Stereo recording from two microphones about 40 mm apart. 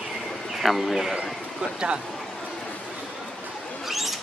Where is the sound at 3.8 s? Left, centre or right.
Centre.